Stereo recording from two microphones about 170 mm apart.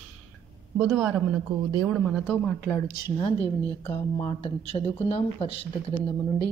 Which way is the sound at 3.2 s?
35° left (ahead or behind).